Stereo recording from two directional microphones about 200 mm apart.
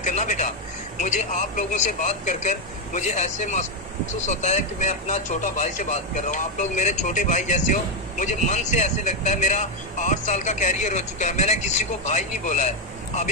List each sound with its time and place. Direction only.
0.0 s speech: 35° left (ahead or behind)